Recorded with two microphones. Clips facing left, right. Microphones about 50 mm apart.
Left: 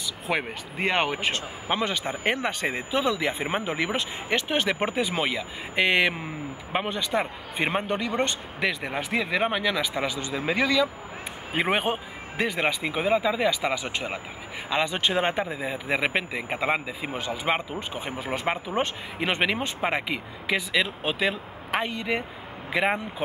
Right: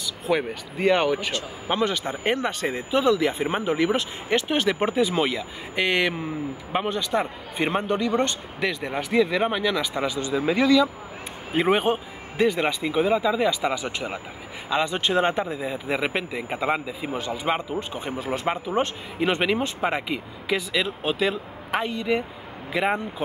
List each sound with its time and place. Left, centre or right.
0.3 s speech: left
1.7 s speech: centre